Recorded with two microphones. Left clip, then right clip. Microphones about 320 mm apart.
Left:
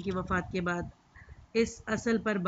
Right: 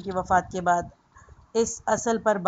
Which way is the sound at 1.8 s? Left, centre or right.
Right.